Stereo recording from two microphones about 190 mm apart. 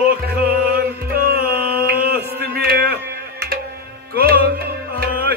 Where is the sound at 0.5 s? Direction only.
55° right (ahead or behind).